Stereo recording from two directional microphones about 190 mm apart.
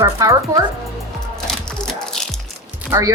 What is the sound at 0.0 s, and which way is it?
Speech, 15° right (ahead or behind).